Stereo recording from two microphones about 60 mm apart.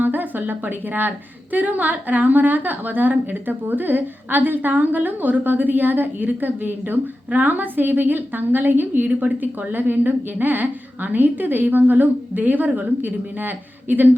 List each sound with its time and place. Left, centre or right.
0.0 s a woman's voice: right